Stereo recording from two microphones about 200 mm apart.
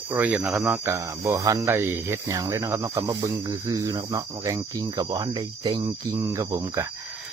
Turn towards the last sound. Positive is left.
turn(degrees=-15)  # may be behind; listen again after turning